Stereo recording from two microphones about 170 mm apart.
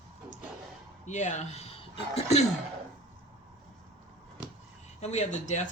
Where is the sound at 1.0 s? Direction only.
45° left (ahead or behind).